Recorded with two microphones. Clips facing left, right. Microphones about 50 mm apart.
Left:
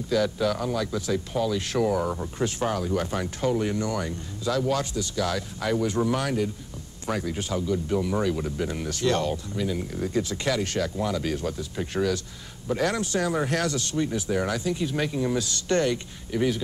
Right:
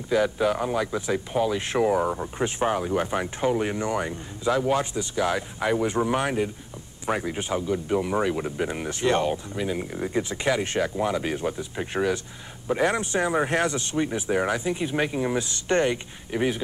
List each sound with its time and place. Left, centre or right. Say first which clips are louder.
0.1 s speech: right 2 dB; right